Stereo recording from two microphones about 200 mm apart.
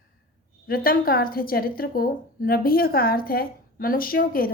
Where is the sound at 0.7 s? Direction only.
45° left (ahead or behind).